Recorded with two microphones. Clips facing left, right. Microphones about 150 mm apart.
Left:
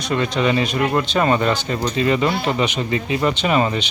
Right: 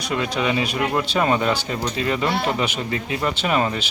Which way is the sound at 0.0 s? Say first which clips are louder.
Left 3 dB; 10° right (ahead or behind).